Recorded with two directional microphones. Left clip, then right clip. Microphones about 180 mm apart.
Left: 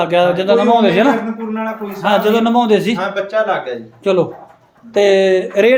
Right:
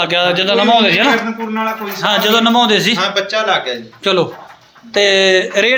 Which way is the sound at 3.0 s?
55° left (ahead or behind).